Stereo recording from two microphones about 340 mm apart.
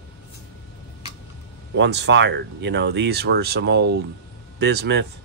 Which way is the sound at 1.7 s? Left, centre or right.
Right.